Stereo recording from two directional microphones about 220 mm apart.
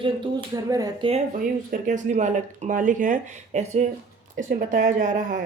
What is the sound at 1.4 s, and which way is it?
Speech, 40° right (ahead or behind).